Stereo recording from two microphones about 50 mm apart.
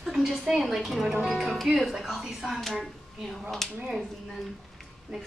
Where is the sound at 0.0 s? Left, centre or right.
Centre.